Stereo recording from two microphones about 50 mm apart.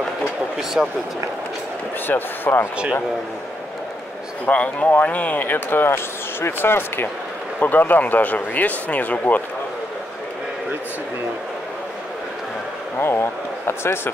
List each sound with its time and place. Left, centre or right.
0.8 s speech: centre
2.0 s speech: left
4.5 s speech: left
7.6 s speech: left
13.0 s speech: left